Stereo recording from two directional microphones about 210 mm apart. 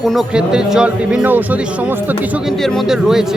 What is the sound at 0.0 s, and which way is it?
Speech, centre (ahead or behind).